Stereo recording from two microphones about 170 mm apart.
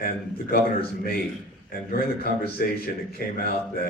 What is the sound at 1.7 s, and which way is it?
A man's voice, 60° left (ahead or behind).